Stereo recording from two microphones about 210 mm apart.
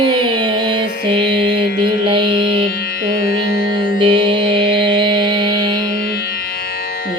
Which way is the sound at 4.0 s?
25° right (ahead or behind).